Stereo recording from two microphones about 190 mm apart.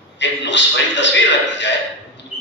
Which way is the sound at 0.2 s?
70° left (ahead or behind).